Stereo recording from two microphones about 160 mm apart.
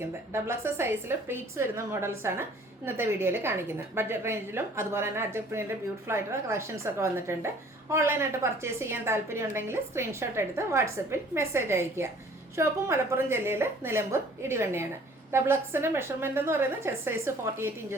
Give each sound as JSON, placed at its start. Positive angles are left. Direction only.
{"t": 0.0, "sound": "speech", "side_deg": -15}